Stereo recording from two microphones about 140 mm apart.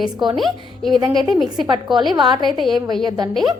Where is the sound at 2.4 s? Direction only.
Centre (ahead or behind).